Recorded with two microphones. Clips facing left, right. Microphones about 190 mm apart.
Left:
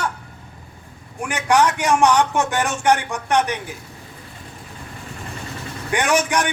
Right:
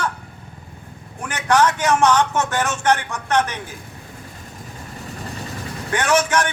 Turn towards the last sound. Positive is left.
turn(degrees=15)  # may be behind; listen again after turning